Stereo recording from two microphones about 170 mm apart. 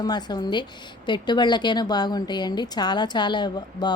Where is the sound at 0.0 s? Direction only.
25° left (ahead or behind).